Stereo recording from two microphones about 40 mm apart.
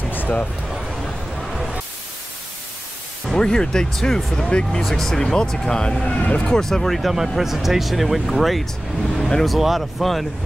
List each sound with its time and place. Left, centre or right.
0.1 s a sound: left
1.0 s a sound: centre
3.3 s speech: centre
4.5 s speech: left
4.8 s speech: centre
6.1 s speech: left
6.4 s speech: centre
7.2 s speech: centre